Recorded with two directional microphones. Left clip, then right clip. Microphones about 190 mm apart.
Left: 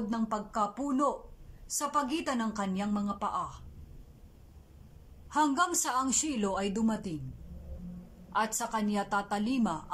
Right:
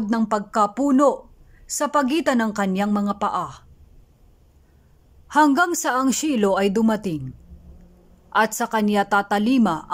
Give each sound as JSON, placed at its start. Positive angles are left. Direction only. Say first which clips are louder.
{"t": 0.0, "sound": "a woman's voice", "louder": "right 11 dB", "side_deg": -50}
{"t": 5.3, "sound": "a woman's voice", "louder": "right 11 dB", "side_deg": -50}
{"t": 8.3, "sound": "a woman's voice", "louder": "right 11 dB", "side_deg": -50}